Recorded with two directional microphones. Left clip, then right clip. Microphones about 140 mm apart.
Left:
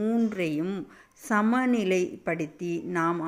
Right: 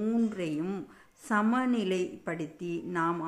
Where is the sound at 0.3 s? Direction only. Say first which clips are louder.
Left 4 dB; 25° left (ahead or behind).